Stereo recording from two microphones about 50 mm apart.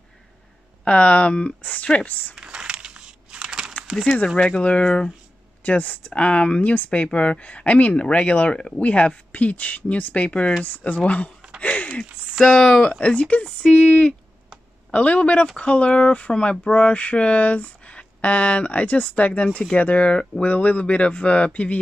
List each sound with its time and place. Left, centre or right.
0.8 s speech: left
2.3 s a sound: centre
4.4 s speech: left
5.6 s speech: left
11.6 s a sound: left
12.4 s speech: centre
12.8 s speech: left